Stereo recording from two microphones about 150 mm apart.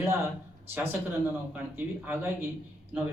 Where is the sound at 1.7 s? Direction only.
15° right (ahead or behind).